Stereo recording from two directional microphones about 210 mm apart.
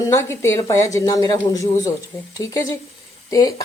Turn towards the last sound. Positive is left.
turn(degrees=15)  # may be behind; listen again after turning